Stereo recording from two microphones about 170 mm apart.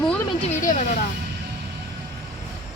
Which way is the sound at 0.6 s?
50° left (ahead or behind).